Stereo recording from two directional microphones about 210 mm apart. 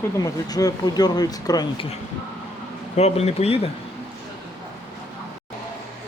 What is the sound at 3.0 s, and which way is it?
Speech, 30° left (ahead or behind).